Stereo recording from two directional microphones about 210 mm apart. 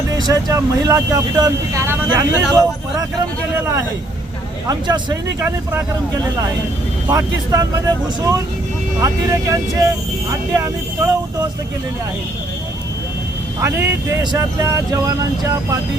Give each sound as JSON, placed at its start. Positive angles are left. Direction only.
{"t": 0.2, "sound": "speech", "side_deg": -15}
{"t": 4.7, "sound": "speech", "side_deg": -20}
{"t": 7.1, "sound": "speech", "side_deg": -15}
{"t": 13.7, "sound": "speech", "side_deg": -10}